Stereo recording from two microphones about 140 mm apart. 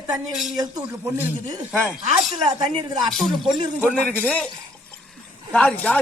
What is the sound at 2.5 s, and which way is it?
Speech, 35° right (ahead or behind).